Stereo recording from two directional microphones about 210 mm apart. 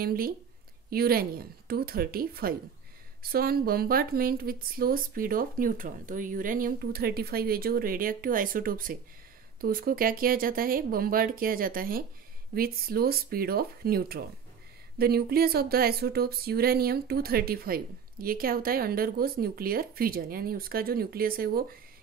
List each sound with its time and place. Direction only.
0.0 s speech: 45° right (ahead or behind)